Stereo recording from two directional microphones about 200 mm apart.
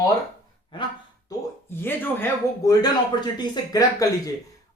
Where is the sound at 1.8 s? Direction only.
10° left (ahead or behind).